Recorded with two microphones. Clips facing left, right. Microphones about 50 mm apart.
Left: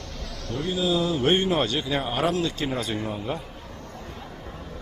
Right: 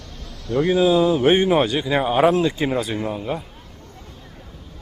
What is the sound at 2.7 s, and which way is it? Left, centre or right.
Speech, centre.